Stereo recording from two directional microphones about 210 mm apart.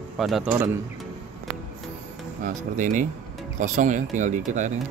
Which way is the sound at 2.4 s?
35° right (ahead or behind).